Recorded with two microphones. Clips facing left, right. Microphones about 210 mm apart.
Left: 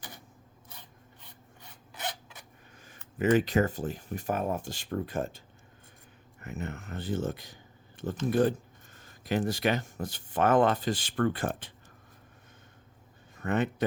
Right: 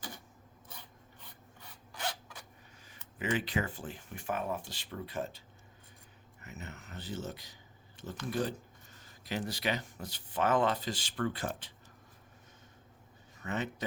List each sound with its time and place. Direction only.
1.9 s rub: 20° left (ahead or behind)
2.8 s speech: 45° left (ahead or behind)
6.4 s speech: 55° left (ahead or behind)
13.3 s speech: 55° left (ahead or behind)